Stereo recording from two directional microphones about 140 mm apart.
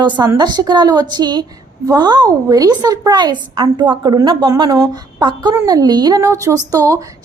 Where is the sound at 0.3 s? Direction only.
30° right (ahead or behind).